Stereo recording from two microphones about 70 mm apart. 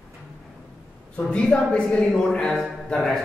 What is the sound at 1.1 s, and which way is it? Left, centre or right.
A man's voice, centre.